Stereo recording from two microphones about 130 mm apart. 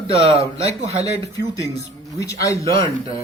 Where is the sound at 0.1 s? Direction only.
50° right (ahead or behind).